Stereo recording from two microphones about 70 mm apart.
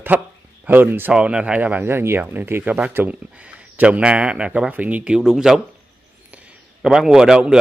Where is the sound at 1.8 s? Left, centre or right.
Right.